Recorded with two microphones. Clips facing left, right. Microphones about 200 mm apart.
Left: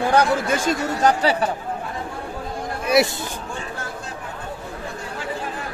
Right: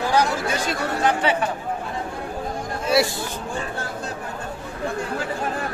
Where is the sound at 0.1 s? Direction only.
55° left (ahead or behind).